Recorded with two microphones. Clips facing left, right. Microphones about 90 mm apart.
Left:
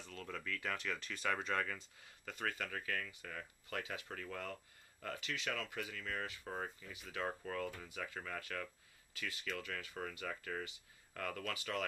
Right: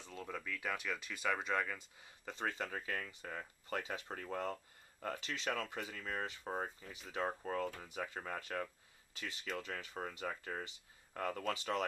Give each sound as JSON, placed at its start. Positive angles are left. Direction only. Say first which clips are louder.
{"t": 0.0, "sound": "speech", "louder": "right 1 dB", "side_deg": -20}
{"t": 2.0, "sound": "speech", "louder": "right 2 dB", "side_deg": -20}